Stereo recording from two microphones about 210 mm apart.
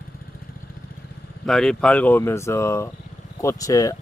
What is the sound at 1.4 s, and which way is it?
Speech, centre (ahead or behind).